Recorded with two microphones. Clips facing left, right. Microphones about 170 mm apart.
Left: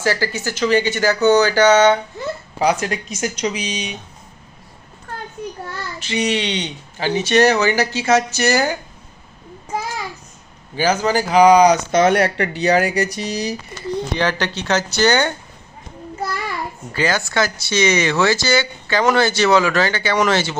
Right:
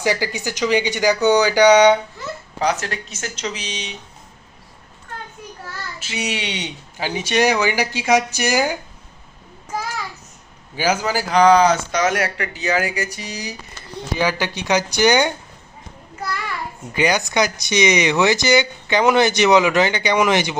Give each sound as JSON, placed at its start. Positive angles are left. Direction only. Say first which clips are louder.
{"t": 0.0, "sound": "speech", "louder": "left 1 dB", "side_deg": -15}
{"t": 2.2, "sound": "speech", "louder": "left 5 dB", "side_deg": 20}
{"t": 2.6, "sound": "speech", "louder": "left 3 dB", "side_deg": 10}
{"t": 5.4, "sound": "child singing", "louder": "left 8 dB", "side_deg": 30}
{"t": 6.0, "sound": "speech", "louder": "left 6 dB", "side_deg": -5}
{"t": 9.6, "sound": "child singing", "louder": "left 2 dB", "side_deg": 30}
{"t": 10.8, "sound": "speech", "louder": "left 3 dB", "side_deg": -10}
{"t": 11.3, "sound": "speech", "louder": "left 2 dB", "side_deg": 10}
{"t": 11.9, "sound": "speech", "louder": "left 5 dB", "side_deg": 35}
{"t": 14.1, "sound": "speech", "louder": "right 3 dB", "side_deg": -10}
{"t": 16.9, "sound": "speech", "louder": "right 1 dB", "side_deg": -15}